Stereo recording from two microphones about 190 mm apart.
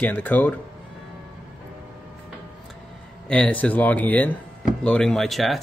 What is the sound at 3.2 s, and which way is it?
Speech, 5° left (ahead or behind).